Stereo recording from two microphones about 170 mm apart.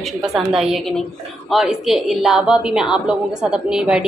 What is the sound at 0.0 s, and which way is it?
A woman's voice, centre (ahead or behind).